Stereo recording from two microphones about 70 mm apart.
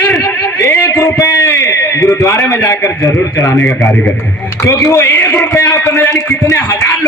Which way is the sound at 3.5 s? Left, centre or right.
Centre.